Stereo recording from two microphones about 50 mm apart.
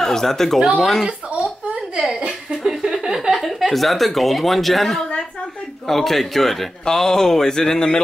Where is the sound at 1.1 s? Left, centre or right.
Right.